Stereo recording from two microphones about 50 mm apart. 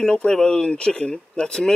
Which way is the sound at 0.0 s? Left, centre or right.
Centre.